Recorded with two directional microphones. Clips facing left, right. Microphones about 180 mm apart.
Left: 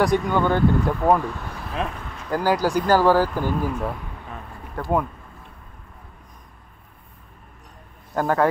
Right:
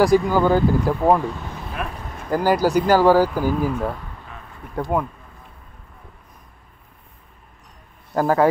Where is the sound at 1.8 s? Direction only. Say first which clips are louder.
Left 2 dB; 25° left (ahead or behind).